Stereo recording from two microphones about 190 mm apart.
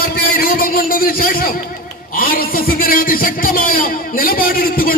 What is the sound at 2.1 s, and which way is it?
A man's voice, 50° left (ahead or behind).